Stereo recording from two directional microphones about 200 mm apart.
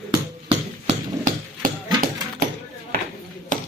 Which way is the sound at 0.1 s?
25° right (ahead or behind).